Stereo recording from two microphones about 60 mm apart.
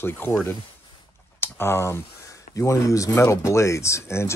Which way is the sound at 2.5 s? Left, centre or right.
Left.